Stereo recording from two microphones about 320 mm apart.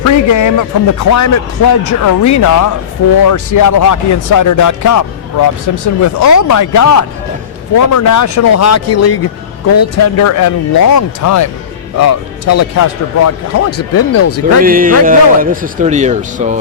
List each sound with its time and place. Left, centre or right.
0.0 s a man's voice: left
14.6 s a man's voice: right